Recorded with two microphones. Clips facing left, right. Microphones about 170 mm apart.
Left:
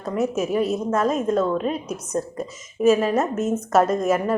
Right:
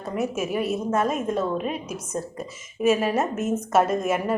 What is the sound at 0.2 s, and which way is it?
A woman's voice, 5° right (ahead or behind).